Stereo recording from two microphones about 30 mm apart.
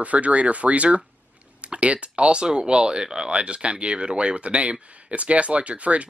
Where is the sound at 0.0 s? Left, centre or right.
Right.